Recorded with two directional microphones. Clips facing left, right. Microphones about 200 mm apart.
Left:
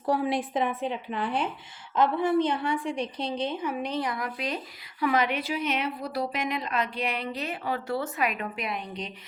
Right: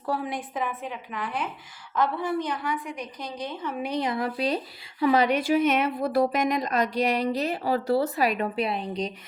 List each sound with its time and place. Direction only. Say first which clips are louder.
0.0 s a woman's voice: left 4 dB; 20° left (ahead or behind)
3.9 s speech: right 4 dB; 25° right (ahead or behind)
5.5 s speech: right 7 dB; 50° right (ahead or behind)